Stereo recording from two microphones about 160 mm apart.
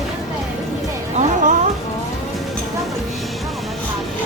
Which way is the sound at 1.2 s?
50° right (ahead or behind).